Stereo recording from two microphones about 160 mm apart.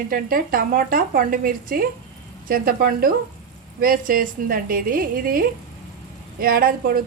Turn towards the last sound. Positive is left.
turn(degrees=-65)  # may be behind; listen again after turning